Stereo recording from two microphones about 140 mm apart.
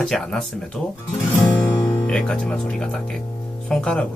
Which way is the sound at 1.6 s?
5° left (ahead or behind).